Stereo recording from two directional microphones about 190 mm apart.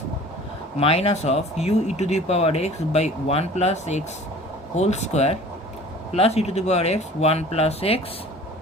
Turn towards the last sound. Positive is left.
turn(degrees=30)  # may be behind; listen again after turning